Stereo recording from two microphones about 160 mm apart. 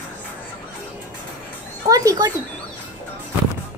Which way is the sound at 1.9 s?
25° right (ahead or behind).